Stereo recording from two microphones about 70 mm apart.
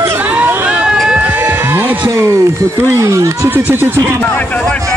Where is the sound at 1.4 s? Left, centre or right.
Right.